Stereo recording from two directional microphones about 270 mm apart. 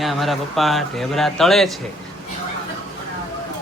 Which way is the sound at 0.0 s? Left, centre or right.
Centre.